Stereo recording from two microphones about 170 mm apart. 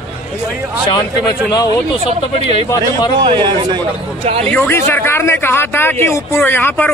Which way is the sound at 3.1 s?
25° right (ahead or behind).